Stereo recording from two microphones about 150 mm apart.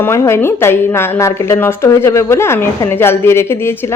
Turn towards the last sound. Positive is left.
turn(degrees=15)  # may be behind; listen again after turning